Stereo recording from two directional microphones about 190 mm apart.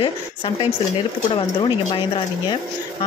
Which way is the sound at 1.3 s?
25° left (ahead or behind).